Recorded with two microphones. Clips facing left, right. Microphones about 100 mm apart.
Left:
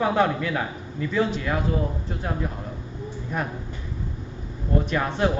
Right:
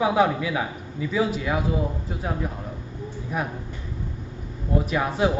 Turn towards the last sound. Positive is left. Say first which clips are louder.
# right 1 dB
turn(degrees=-5)  # may be behind; listen again after turning